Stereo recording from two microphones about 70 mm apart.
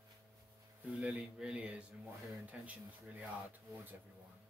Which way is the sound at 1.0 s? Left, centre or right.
Centre.